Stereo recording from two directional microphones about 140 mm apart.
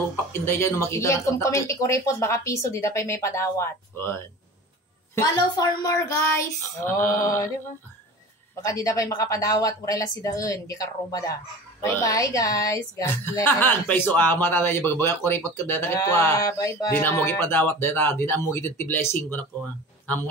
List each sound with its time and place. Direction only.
0.3 s speech: 20° left (ahead or behind)
8.6 s speech: 25° left (ahead or behind)